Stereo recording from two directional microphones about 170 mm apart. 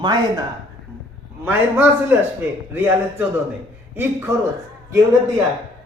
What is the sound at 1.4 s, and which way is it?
Speech, 10° right (ahead or behind).